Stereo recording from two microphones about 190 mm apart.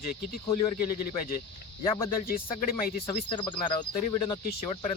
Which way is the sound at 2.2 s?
50° left (ahead or behind).